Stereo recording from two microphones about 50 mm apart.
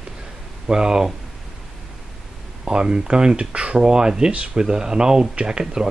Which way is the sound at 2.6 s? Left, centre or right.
Centre.